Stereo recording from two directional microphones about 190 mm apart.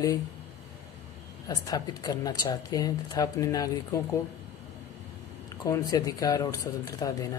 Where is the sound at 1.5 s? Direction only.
20° left (ahead or behind).